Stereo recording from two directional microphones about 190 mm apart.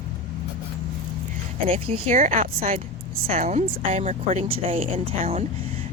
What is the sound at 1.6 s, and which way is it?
A woman's voice, 30° right (ahead or behind).